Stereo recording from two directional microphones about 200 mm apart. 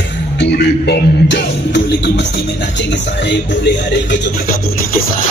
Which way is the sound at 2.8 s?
60° left (ahead or behind).